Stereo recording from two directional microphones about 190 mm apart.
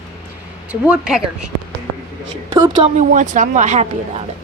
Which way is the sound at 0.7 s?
5° right (ahead or behind).